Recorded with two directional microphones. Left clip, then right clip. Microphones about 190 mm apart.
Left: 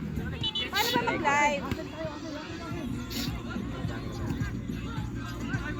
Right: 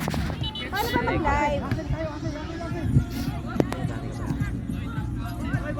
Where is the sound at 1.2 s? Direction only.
55° right (ahead or behind).